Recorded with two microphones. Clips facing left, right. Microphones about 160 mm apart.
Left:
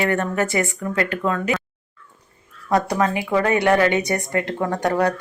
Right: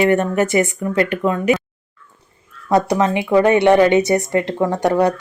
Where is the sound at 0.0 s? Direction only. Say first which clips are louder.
Right 6 dB; 20° right (ahead or behind).